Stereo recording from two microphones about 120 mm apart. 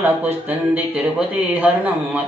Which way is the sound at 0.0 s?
15° right (ahead or behind).